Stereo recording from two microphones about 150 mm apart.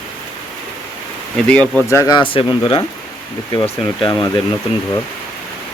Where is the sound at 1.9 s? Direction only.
20° left (ahead or behind).